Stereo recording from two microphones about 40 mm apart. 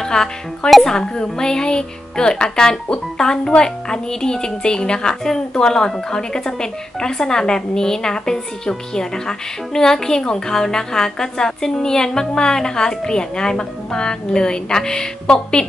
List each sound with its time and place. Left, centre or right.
0.0 s a woman's voice: centre
0.7 s speech: centre
0.9 s a woman's voice: centre